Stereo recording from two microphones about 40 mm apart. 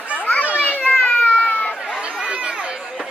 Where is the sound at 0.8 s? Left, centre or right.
Left.